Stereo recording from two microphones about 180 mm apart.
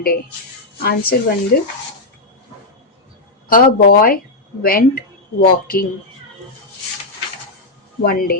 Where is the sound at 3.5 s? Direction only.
55° left (ahead or behind).